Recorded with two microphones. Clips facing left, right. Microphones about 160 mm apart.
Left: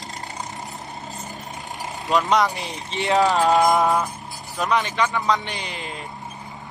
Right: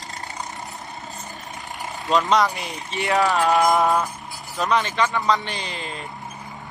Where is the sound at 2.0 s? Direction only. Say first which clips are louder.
Even; 20° left (ahead or behind).